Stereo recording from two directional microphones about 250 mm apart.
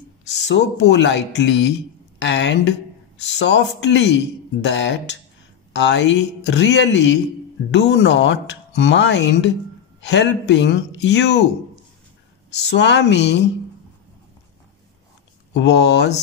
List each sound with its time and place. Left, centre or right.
0.5 s a woman's voice: left
12.5 s speech: left
15.5 s speech: left